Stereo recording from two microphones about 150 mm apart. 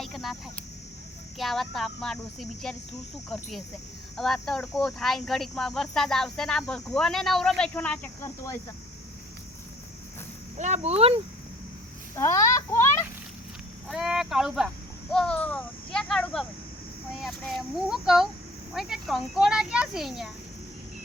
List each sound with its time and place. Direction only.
0.0 s a sound: centre (ahead or behind)
1.4 s speech: centre (ahead or behind); by 8.6 s 15° left (ahead or behind)
10.6 s speech: 45° right (ahead or behind)
12.1 s speech: 20° left (ahead or behind)
13.9 s speech: 5° right (ahead or behind)